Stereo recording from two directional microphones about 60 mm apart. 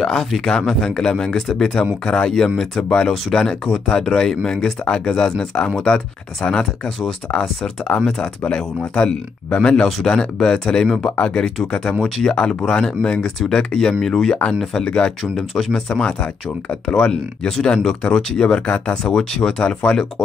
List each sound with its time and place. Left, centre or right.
0.0 s speech: centre